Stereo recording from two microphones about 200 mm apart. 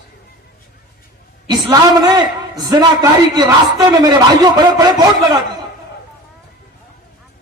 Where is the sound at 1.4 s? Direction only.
20° right (ahead or behind).